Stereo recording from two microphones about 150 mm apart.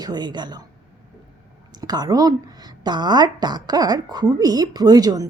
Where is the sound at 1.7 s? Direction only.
25° right (ahead or behind).